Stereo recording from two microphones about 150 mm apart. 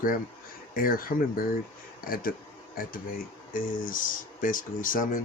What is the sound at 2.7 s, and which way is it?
Speech, 70° left (ahead or behind).